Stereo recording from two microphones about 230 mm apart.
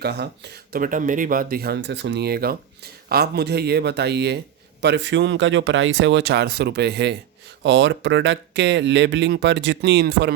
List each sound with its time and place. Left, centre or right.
0.0 s speech: right